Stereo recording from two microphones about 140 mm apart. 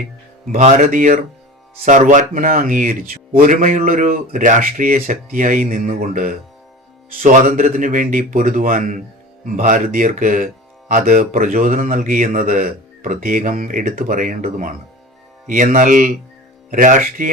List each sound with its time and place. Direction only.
0.6 s speech: 60° right (ahead or behind); by 14.8 s 85° right
15.4 s speech: 70° right (ahead or behind)